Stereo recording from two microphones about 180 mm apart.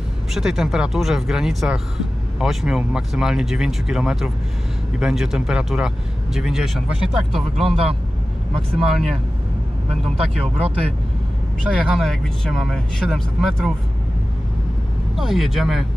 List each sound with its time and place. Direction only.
0.3 s speech: centre (ahead or behind)
7.6 s speech: 30° right (ahead or behind)
8.7 s speech: centre (ahead or behind)
9.8 s speech: 35° right (ahead or behind)
11.9 s speech: centre (ahead or behind)
15.1 s speech: centre (ahead or behind)